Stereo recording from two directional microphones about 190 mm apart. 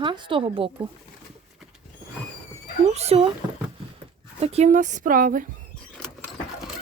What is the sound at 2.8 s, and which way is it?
Speech, 35° right (ahead or behind).